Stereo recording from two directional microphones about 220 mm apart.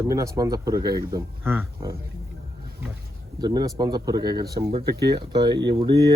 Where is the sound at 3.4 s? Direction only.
20° right (ahead or behind).